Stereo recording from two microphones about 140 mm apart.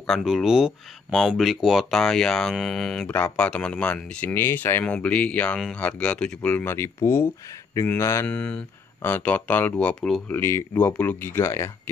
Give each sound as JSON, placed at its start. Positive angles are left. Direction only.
{"t": 0.0, "sound": "speech", "side_deg": 0}
{"t": 8.3, "sound": "speech", "side_deg": 10}
{"t": 10.3, "sound": "speech", "side_deg": 15}